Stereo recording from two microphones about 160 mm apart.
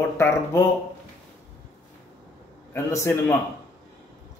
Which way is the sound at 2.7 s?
15° left (ahead or behind).